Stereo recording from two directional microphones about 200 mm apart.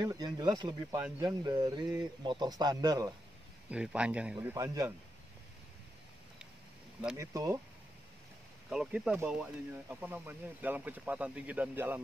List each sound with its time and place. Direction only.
0.0 s a man's voice: 20° right (ahead or behind)
3.7 s speech: 5° right (ahead or behind)
7.2 s speech: 15° right (ahead or behind)
8.6 s speech: 5° right (ahead or behind)